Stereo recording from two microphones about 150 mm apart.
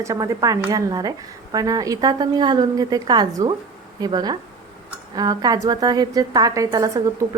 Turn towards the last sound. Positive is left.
turn(degrees=-25)  # may be behind; listen again after turning